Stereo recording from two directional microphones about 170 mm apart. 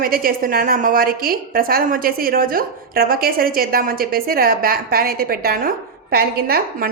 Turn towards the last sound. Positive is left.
turn(degrees=-60)  # may be behind; listen again after turning